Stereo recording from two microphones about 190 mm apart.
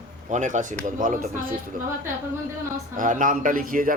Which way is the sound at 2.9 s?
45° right (ahead or behind).